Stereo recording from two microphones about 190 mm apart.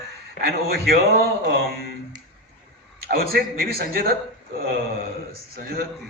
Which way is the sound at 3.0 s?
50° right (ahead or behind).